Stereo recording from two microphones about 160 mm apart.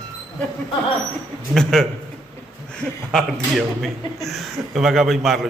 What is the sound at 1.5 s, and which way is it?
Speech, 5° left (ahead or behind).